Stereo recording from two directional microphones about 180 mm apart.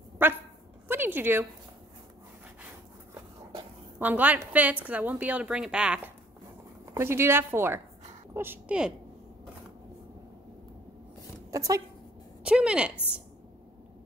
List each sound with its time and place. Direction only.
0.2 s dog: 10° right (ahead or behind)
0.8 s a sound: 10° right (ahead or behind)
4.0 s a woman's voice: 10° right (ahead or behind)
11.5 s speech: 20° right (ahead or behind)
12.4 s a woman's voice: 5° right (ahead or behind)